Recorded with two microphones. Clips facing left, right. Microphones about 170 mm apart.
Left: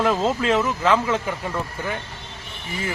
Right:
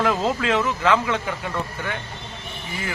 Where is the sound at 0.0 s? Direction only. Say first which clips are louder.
Left 1 dB; centre (ahead or behind).